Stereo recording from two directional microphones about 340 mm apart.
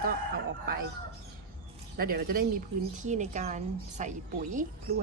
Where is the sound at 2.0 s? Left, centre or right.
Right.